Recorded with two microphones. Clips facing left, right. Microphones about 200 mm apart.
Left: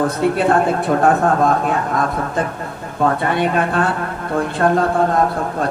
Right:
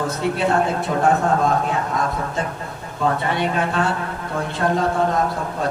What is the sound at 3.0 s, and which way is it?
A man's voice, 55° left (ahead or behind).